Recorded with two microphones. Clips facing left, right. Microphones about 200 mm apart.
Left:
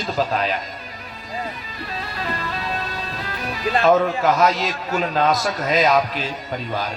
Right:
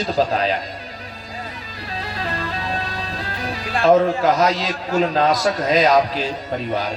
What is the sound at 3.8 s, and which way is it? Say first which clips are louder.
A man's voice: right 3 dB; 35° right (ahead or behind).